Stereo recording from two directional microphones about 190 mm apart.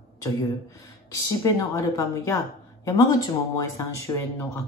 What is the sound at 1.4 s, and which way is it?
Speech, 15° left (ahead or behind).